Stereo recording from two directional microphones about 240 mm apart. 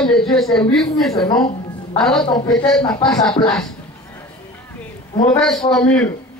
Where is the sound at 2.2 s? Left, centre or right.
Centre.